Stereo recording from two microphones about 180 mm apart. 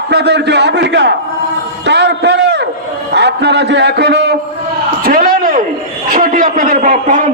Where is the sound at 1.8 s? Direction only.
70° right (ahead or behind).